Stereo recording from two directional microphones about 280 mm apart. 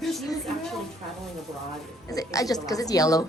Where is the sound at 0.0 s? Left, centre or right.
Centre.